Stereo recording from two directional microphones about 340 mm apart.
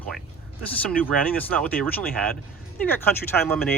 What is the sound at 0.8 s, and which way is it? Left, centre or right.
Speech, centre.